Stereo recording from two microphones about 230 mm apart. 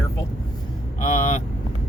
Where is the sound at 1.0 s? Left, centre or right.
Left.